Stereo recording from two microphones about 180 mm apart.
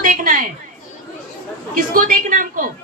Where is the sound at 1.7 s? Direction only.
50° right (ahead or behind).